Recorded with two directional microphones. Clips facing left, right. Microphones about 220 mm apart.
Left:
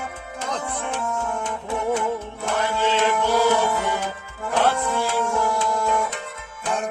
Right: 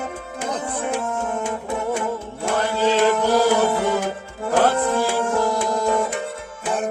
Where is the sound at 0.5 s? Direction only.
10° right (ahead or behind).